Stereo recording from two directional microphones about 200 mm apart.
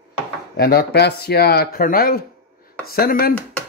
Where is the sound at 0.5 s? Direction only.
55° left (ahead or behind).